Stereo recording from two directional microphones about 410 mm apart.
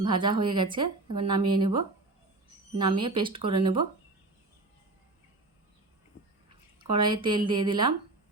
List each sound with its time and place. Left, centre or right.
0.0 s speech: centre
6.1 s a sound: left
6.9 s speech: centre